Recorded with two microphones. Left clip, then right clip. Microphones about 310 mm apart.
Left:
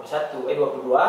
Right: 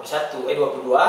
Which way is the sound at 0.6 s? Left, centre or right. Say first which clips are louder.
Right 2 dB; left.